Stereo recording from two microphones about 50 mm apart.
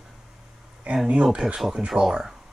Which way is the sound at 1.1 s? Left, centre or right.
Right.